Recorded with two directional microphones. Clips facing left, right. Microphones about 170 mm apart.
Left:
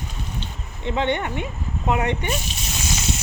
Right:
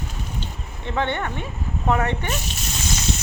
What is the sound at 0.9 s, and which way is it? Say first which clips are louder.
Speech: left 2 dB; 20° left (ahead or behind).